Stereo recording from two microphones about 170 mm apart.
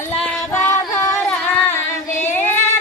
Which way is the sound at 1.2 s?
10° left (ahead or behind).